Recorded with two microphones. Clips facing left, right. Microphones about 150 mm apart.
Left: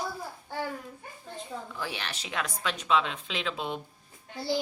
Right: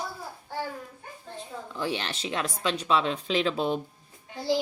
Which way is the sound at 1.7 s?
25° right (ahead or behind).